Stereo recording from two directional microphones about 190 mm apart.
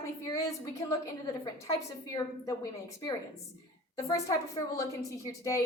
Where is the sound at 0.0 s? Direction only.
15° left (ahead or behind).